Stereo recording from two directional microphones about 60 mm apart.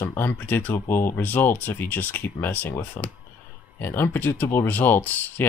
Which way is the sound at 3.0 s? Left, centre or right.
Left.